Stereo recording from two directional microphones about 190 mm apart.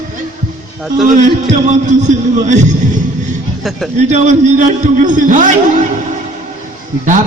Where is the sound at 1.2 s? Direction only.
40° right (ahead or behind).